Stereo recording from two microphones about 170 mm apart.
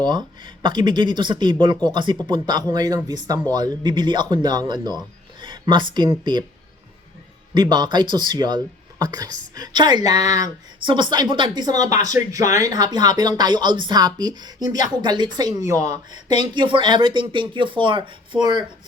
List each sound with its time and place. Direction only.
0.0 s speech: 25° right (ahead or behind)
7.5 s speech: 25° right (ahead or behind)
10.2 s speech: 45° left (ahead or behind)
10.8 s speech: 25° right (ahead or behind)